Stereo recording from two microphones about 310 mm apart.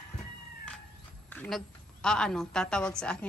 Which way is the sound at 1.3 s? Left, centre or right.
Centre.